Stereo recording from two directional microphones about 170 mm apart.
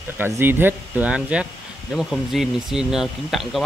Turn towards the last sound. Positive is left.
turn(degrees=0)  # may be behind; listen again after turning